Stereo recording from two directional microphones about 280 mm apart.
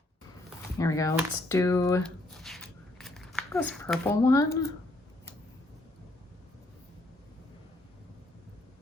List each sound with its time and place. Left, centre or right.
0.8 s speech: centre